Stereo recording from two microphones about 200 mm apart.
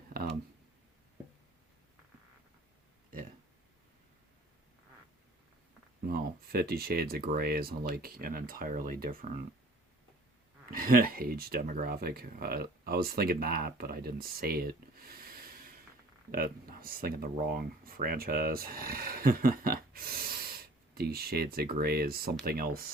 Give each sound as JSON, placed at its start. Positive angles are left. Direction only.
{"t": 6.1, "sound": "speech", "side_deg": -50}
{"t": 10.7, "sound": "speech", "side_deg": -45}